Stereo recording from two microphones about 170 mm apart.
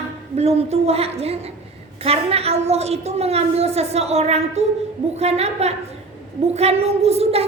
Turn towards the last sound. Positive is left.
turn(degrees=-35)  # may be behind; listen again after turning